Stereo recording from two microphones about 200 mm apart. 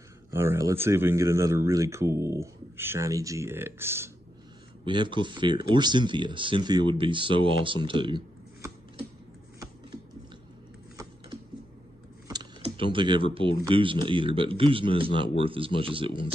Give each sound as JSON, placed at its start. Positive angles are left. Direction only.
{"t": 0.3, "sound": "speech", "side_deg": -15}
{"t": 4.8, "sound": "speech", "side_deg": -25}
{"t": 12.3, "sound": "speech", "side_deg": -25}